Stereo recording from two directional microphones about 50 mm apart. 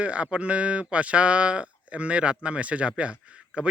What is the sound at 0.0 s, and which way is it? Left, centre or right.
Speech, right.